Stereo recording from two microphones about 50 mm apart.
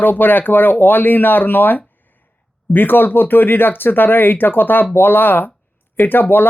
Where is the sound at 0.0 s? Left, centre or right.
Left.